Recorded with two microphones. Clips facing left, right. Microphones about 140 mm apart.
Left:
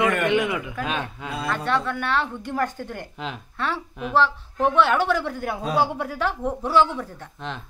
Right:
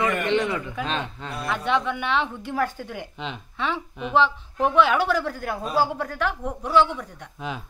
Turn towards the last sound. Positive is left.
turn(degrees=5)  # may be behind; listen again after turning